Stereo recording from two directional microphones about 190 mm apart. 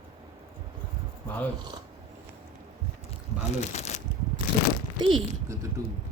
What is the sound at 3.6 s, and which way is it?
Speech, 35° left (ahead or behind).